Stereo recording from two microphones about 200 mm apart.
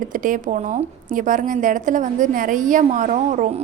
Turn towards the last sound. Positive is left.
turn(degrees=-40)  # may be behind; listen again after turning